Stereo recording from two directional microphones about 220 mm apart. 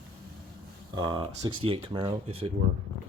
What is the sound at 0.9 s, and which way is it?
Speech, 20° right (ahead or behind).